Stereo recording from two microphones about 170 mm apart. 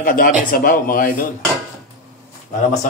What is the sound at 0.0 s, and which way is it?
A man's voice, 55° left (ahead or behind).